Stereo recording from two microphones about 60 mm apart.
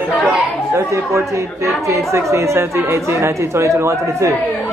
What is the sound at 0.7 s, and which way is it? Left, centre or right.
Speech, right.